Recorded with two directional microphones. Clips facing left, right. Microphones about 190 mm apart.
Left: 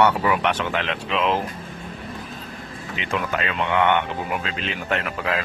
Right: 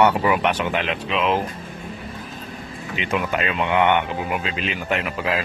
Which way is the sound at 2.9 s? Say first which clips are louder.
Right 2 dB; 15° right (ahead or behind).